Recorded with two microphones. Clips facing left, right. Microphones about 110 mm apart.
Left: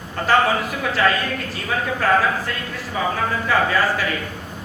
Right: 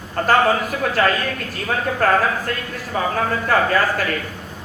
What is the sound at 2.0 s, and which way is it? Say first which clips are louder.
Speech: right 1 dB; 45° right (ahead or behind).